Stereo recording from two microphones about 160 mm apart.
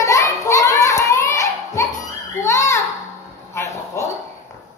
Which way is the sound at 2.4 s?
20° left (ahead or behind).